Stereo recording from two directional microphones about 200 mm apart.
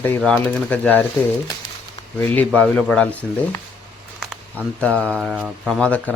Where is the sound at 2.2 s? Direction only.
10° left (ahead or behind).